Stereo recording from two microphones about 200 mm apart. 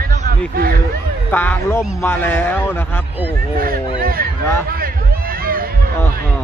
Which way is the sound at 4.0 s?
45° right (ahead or behind).